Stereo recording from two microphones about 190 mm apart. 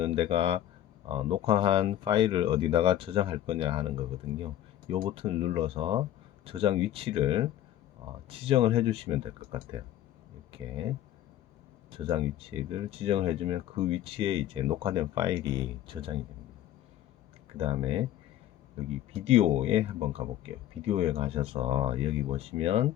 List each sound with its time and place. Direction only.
0.0 s speech: 30° right (ahead or behind)
11.9 s speech: 25° right (ahead or behind)
17.6 s speech: 30° right (ahead or behind)